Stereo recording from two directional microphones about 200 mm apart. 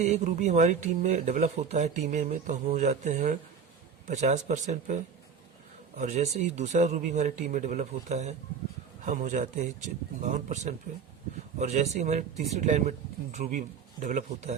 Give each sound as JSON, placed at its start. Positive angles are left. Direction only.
{"t": 0.0, "sound": "speech", "side_deg": -35}
{"t": 6.0, "sound": "speech", "side_deg": -35}